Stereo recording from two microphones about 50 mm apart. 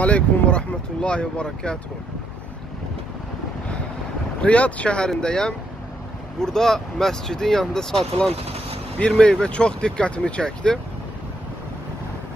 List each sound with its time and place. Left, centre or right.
0.0 s speech: left
4.4 s speech: left; by 8.1 s centre
9.0 s speech: left